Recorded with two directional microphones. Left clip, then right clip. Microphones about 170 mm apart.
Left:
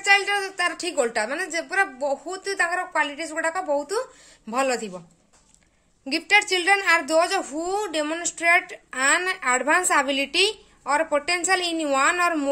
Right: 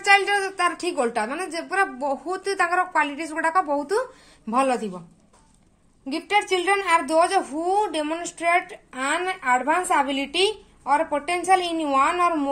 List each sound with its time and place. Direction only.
0.0 s a woman's voice: centre (ahead or behind)
4.5 s a woman's voice: 20° left (ahead or behind)
6.0 s a woman's voice: 35° left (ahead or behind)